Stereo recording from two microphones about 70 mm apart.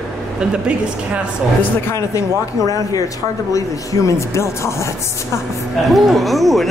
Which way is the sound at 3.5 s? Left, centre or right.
Left.